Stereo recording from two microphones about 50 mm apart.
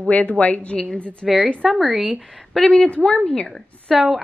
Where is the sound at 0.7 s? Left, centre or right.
Centre.